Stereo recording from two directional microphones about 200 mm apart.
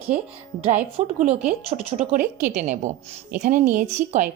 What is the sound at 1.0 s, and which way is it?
Speech, 35° right (ahead or behind).